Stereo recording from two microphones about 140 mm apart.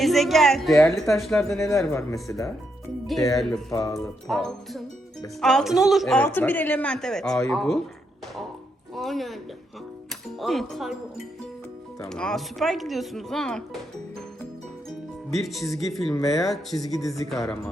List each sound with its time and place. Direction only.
0.0 s speech: centre (ahead or behind)
1.4 s speech: 20° left (ahead or behind)
3.3 s speech: centre (ahead or behind)
3.7 s speech: 25° left (ahead or behind)
4.3 s speech: centre (ahead or behind)
6.1 s speech: 15° left (ahead or behind)
9.0 s speech: centre (ahead or behind)
12.0 s speech: 5° left (ahead or behind)
14.8 s music: centre (ahead or behind)
15.8 s speech: centre (ahead or behind)